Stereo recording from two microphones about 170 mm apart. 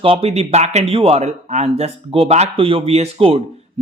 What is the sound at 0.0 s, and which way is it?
Speech, 35° right (ahead or behind).